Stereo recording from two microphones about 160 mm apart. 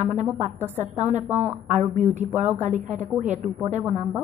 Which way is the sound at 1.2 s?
10° right (ahead or behind).